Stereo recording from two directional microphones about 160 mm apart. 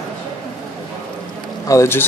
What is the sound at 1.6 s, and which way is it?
Speech, 15° left (ahead or behind).